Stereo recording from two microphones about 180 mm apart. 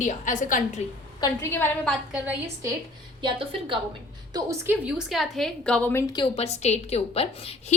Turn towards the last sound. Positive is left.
turn(degrees=35)  # may be behind; listen again after turning